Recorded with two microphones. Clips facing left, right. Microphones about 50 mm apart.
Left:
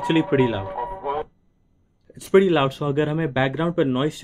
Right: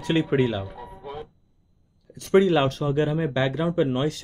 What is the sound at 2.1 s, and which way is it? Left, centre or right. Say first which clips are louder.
Speech: left 2 dB; centre.